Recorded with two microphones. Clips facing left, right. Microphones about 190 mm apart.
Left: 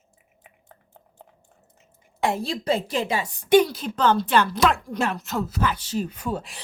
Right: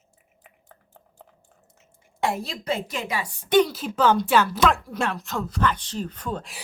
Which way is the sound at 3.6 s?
5° right (ahead or behind).